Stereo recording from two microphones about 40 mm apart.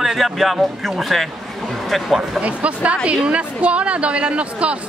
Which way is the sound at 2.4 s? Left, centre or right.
Right.